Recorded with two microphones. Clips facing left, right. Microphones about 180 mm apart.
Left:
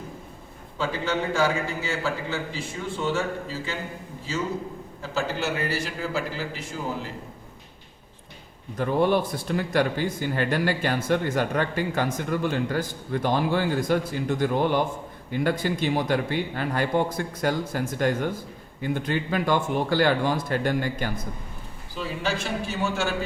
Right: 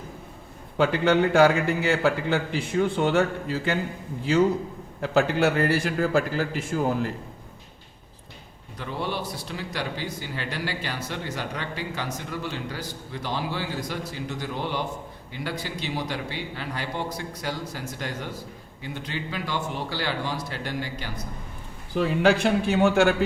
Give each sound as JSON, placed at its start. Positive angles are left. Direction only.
{"t": 0.8, "sound": "a man's voice", "side_deg": -65}
{"t": 5.0, "sound": "a man's voice", "side_deg": -60}
{"t": 8.8, "sound": "speech", "side_deg": 50}
{"t": 21.9, "sound": "a man's voice", "side_deg": -60}